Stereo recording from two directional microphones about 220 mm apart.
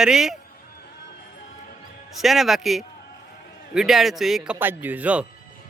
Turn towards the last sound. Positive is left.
turn(degrees=-5)  # may be behind; listen again after turning